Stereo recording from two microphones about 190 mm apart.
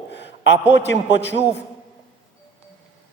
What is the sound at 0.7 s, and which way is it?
Speech, 65° left (ahead or behind).